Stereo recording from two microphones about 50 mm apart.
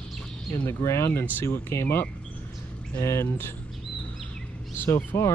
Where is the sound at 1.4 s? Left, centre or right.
Left.